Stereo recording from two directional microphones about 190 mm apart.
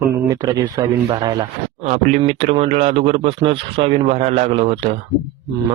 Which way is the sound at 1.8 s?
35° right (ahead or behind).